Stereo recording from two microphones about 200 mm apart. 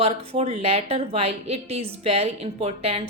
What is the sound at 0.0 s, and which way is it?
A woman's voice, 30° right (ahead or behind).